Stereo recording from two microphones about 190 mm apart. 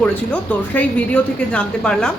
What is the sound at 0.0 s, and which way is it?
A woman's voice, 5° left (ahead or behind).